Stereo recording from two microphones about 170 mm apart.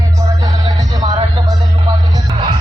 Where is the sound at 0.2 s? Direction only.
20° right (ahead or behind).